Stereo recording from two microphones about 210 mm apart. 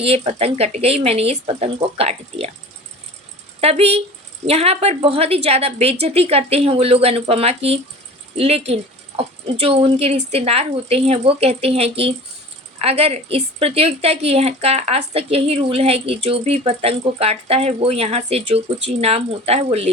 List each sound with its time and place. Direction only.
0.0 s a woman's voice: 30° right (ahead or behind)
3.6 s a woman's voice: 30° right (ahead or behind)